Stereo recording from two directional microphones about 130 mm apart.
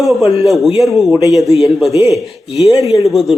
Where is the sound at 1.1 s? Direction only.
25° right (ahead or behind).